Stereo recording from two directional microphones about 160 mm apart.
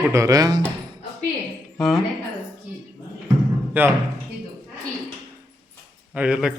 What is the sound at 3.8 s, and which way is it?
Speech, 10° right (ahead or behind).